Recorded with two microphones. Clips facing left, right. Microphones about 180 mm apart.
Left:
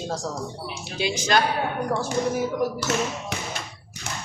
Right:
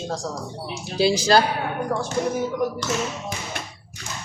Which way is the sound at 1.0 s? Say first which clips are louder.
Right 5 dB; 35° right (ahead or behind).